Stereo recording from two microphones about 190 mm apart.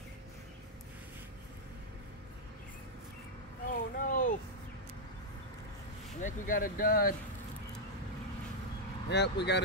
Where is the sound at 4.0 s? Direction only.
45° left (ahead or behind).